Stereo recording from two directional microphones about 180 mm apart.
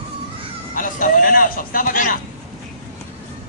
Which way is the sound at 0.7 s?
50° left (ahead or behind).